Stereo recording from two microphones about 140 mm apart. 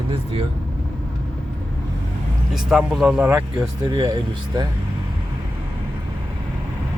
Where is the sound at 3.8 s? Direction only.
25° right (ahead or behind).